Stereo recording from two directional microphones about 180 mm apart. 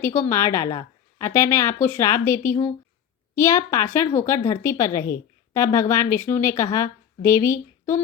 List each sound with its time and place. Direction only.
0.0 s a woman's voice: 15° left (ahead or behind)